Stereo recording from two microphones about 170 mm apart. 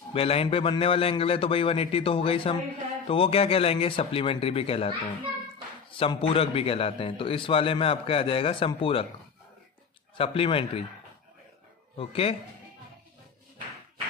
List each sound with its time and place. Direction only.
0.1 s a man's voice: 35° left (ahead or behind)
10.1 s a man's voice: 35° left (ahead or behind)
12.0 s a man's voice: 35° left (ahead or behind)